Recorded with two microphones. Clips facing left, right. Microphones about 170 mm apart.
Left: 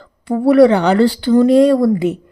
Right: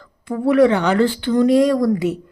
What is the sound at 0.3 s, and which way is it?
A woman's voice, 35° left (ahead or behind).